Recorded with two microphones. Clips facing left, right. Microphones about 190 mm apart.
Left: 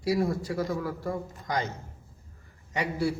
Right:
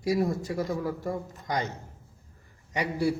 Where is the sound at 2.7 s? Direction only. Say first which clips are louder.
Right 1 dB; 15° right (ahead or behind).